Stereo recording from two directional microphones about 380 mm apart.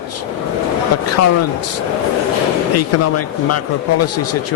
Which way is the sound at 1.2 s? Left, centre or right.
Left.